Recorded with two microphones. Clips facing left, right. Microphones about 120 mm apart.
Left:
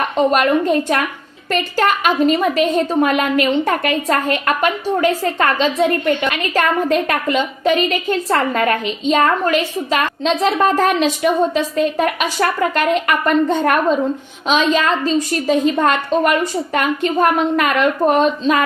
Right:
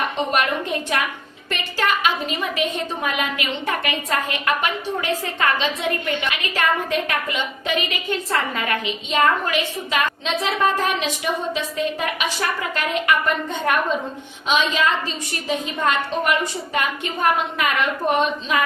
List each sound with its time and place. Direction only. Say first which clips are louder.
0.3 s a woman's voice: left 8 dB; 45° left (ahead or behind)